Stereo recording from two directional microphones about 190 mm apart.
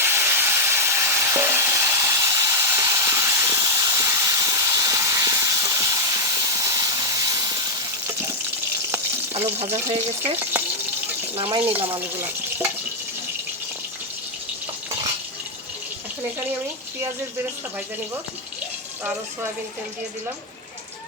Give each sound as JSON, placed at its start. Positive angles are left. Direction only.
{"t": 0.0, "sound": "a sound", "side_deg": -15}
{"t": 8.0, "sound": "water tap", "side_deg": -15}
{"t": 9.6, "sound": "speech", "side_deg": -35}
{"t": 10.5, "sound": "water", "side_deg": -10}
{"t": 11.3, "sound": "speech", "side_deg": -30}
{"t": 11.9, "sound": "speech", "side_deg": -10}